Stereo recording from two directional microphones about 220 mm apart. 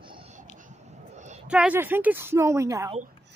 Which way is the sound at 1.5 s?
5° right (ahead or behind).